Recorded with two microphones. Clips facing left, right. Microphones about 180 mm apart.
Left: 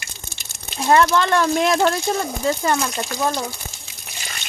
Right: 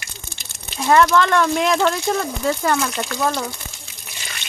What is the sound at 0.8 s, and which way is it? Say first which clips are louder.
Speech: right 1 dB; 30° left (ahead or behind).